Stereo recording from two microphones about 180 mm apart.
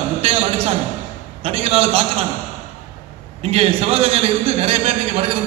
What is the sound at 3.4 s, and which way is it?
A man's voice, 35° right (ahead or behind).